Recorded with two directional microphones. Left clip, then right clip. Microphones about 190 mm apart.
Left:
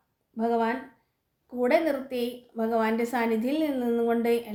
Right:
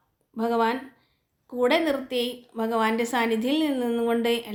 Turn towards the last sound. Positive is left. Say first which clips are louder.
# right 1 dB
turn(degrees=0)  # may be behind; listen again after turning